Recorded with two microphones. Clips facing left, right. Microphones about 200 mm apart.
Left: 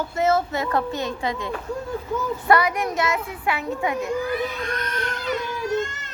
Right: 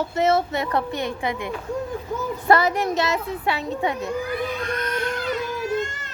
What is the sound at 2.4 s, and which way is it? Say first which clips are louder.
A woman's voice: right 2 dB; 25° right (ahead or behind).